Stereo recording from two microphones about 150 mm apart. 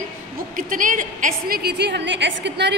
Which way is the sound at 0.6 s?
65° right (ahead or behind).